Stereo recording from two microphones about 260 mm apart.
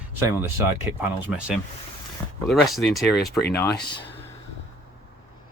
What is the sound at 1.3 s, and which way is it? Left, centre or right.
Speech, centre.